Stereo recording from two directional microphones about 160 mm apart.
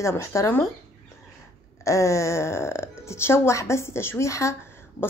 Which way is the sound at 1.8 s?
20° left (ahead or behind).